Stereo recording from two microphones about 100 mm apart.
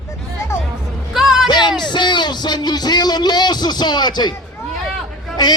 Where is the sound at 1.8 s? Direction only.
50° left (ahead or behind).